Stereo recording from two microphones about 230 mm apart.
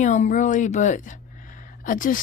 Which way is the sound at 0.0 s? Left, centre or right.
Left.